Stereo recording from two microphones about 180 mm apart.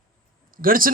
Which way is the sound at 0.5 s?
50° right (ahead or behind).